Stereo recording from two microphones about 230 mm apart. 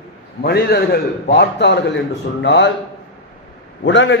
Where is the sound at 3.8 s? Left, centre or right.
Left.